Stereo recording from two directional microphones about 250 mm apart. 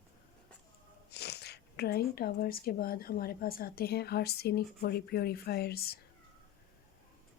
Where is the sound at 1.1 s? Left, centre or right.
Left.